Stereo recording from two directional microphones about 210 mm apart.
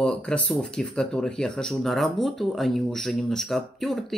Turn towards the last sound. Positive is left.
turn(degrees=0)  # may be behind; listen again after turning